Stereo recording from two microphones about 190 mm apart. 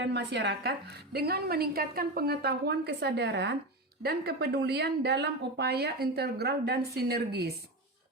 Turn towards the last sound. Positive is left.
turn(degrees=-55)  # may be behind; listen again after turning